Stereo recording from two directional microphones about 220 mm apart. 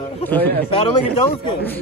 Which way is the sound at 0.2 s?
10° left (ahead or behind).